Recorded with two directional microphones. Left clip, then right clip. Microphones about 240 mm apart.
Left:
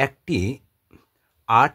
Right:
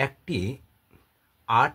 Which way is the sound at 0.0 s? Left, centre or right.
Left.